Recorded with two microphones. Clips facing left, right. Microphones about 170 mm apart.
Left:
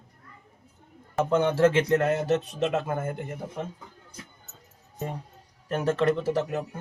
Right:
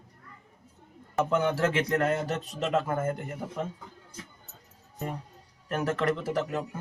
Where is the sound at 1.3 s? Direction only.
30° left (ahead or behind).